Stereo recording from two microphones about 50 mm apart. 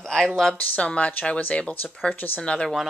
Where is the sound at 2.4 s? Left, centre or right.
Left.